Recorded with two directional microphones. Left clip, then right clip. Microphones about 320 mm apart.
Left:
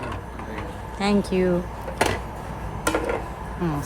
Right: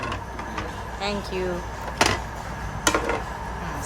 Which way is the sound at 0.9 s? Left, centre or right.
Centre.